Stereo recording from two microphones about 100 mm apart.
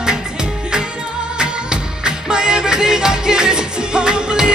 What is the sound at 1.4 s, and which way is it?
Music, 10° right (ahead or behind).